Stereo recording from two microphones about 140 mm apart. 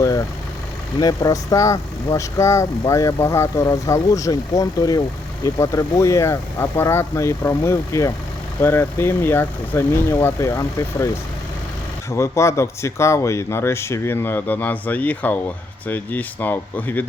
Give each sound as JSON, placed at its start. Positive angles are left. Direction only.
{"t": 0.0, "sound": "vehicle", "side_deg": 25}
{"t": 0.9, "sound": "speech", "side_deg": 25}
{"t": 12.1, "sound": "speech", "side_deg": 20}